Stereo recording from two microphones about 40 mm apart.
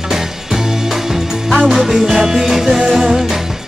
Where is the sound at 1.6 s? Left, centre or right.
Centre.